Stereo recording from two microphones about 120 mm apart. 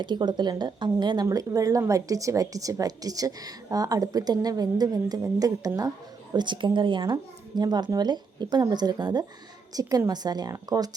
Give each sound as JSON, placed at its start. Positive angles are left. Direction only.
{"t": 0.0, "sound": "speech", "side_deg": -40}
{"t": 6.3, "sound": "speech", "side_deg": -40}